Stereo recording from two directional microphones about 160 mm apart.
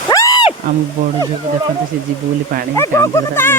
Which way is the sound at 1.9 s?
65° right (ahead or behind).